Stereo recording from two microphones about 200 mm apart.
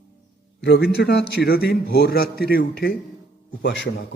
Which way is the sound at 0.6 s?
60° left (ahead or behind).